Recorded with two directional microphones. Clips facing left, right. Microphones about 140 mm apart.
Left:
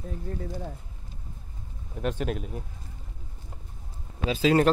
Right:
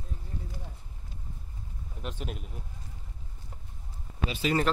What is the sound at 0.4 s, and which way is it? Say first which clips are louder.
Speech: left 10 dB; 70° left (ahead or behind).